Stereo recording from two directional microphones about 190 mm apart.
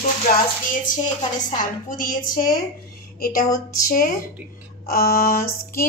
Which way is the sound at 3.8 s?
45° left (ahead or behind).